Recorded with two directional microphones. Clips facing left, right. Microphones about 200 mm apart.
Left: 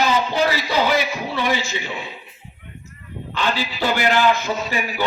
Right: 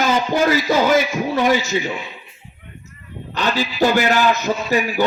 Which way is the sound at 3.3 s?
45° right (ahead or behind).